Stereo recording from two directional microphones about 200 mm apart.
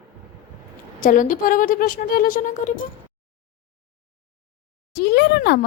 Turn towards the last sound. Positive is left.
turn(degrees=55)  # may be behind; listen again after turning